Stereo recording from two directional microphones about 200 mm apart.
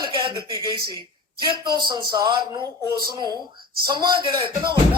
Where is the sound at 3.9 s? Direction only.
25° right (ahead or behind).